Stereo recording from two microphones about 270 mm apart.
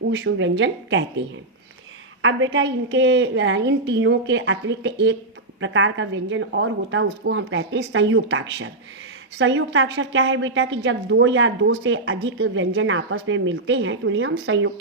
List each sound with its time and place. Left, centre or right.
0.1 s a woman's voice: right
2.2 s a woman's voice: right